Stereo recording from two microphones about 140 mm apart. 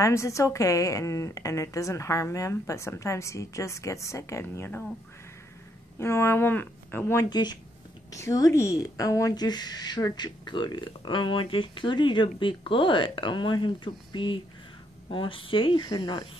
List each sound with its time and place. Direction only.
0.0 s a woman's voice: 20° left (ahead or behind)
5.9 s speech: 20° left (ahead or behind)
7.2 s a woman's voice: 30° left (ahead or behind)